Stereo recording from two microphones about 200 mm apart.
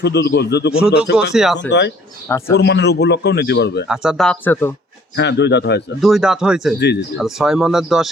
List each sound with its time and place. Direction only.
0.0 s a man's voice: 55° left (ahead or behind)
1.3 s speech: centre (ahead or behind)
2.2 s a man's voice: 15° left (ahead or behind)
2.6 s a man's voice: 60° left (ahead or behind)
3.8 s speech: 5° right (ahead or behind)
5.1 s a man's voice: 60° left (ahead or behind)
6.0 s speech: centre (ahead or behind)
6.7 s a man's voice: 55° left (ahead or behind)
7.2 s speech: centre (ahead or behind)